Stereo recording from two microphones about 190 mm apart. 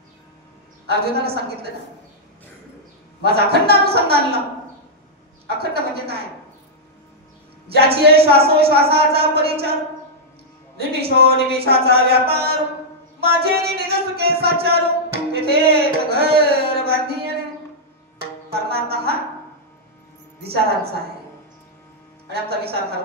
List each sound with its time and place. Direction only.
0.8 s music: 55° right (ahead or behind)
3.2 s music: 55° right (ahead or behind)
5.5 s music: 55° right (ahead or behind)
7.6 s music: 55° right (ahead or behind)
10.8 s music: 55° right (ahead or behind)
18.2 s music: 55° right (ahead or behind)
22.5 s music: 55° right (ahead or behind)